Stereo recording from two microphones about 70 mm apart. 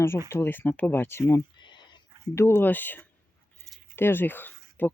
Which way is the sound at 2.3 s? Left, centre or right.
Left.